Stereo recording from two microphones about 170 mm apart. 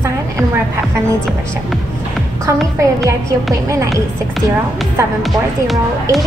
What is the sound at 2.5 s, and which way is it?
A woman's voice, 15° right (ahead or behind).